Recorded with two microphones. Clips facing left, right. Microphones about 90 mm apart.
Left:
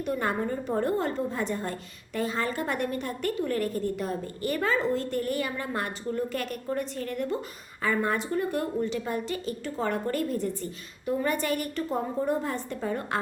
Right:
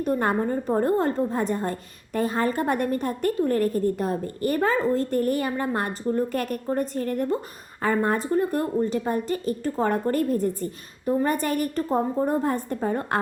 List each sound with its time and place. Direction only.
0.0 s a woman's voice: 45° right (ahead or behind)